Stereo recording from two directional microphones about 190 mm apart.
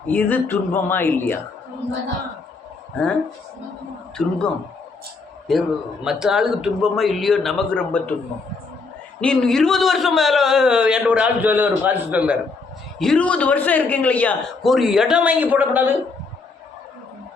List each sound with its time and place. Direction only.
0.1 s speech: 10° left (ahead or behind)
3.0 s speech: 5° left (ahead or behind)
4.2 s a man's voice: 5° left (ahead or behind)
5.5 s a man's voice: centre (ahead or behind)
9.2 s a man's voice: 5° left (ahead or behind)
13.0 s a man's voice: 5° left (ahead or behind)